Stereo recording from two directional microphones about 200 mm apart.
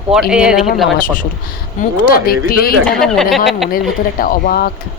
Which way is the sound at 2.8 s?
Centre (ahead or behind).